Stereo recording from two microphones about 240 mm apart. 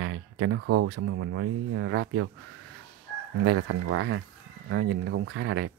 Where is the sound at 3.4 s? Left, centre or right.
Right.